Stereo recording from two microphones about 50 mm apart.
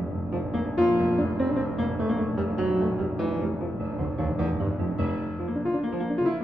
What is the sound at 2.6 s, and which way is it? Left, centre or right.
Music, centre.